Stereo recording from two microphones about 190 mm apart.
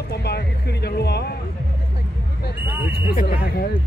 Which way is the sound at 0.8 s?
60° left (ahead or behind).